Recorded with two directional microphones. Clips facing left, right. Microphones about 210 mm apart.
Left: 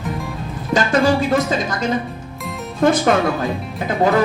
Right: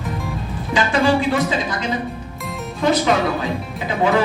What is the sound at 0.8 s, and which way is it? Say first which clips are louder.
Music: left 1 dB; 45° left (ahead or behind).